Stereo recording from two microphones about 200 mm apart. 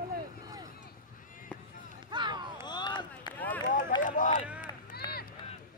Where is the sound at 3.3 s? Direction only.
10° left (ahead or behind).